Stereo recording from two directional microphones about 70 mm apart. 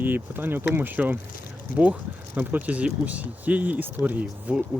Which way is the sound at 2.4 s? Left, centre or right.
Right.